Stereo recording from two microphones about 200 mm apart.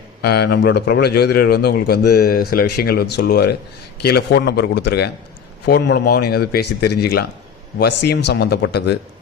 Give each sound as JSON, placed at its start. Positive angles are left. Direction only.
{"t": 0.2, "sound": "a man's voice", "side_deg": 55}